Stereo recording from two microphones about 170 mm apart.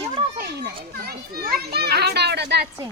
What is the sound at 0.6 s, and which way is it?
A child's voice, 65° right (ahead or behind).